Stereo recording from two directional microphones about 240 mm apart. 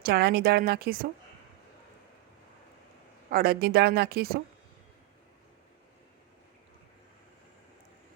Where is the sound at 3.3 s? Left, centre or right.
Right.